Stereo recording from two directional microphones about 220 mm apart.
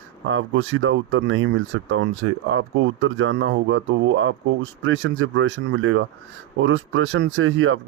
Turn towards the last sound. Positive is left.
turn(degrees=-65)  # may be behind; listen again after turning